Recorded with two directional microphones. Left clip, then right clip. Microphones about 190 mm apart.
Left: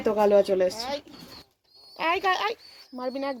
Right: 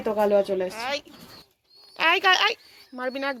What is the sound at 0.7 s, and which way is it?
Speech, centre (ahead or behind).